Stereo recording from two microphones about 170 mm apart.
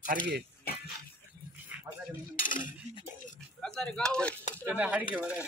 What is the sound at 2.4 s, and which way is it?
Cutlery, 50° left (ahead or behind).